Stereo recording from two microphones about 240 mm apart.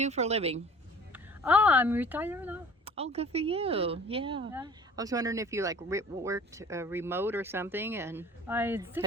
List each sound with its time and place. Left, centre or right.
0.0 s speech: right
1.1 s speech: centre
2.8 s speech: right; by 8.9 s centre